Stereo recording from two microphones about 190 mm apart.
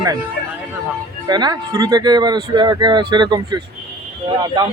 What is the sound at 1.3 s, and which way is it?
Speech, 20° right (ahead or behind).